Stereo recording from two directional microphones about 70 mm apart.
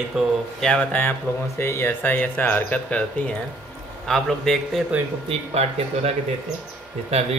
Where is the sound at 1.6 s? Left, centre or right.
Left; by 3.3 s centre.